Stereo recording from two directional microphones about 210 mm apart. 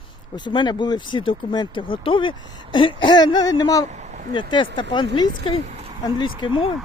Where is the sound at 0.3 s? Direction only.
20° left (ahead or behind).